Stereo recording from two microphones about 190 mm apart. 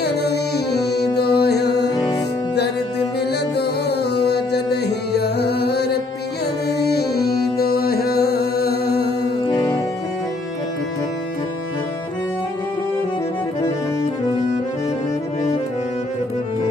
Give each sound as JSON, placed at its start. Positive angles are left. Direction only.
{"t": 0.0, "sound": "music", "side_deg": 60}
{"t": 3.5, "sound": "music", "side_deg": 60}